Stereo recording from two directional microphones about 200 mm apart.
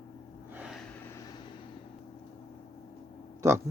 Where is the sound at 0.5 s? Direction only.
5° right (ahead or behind).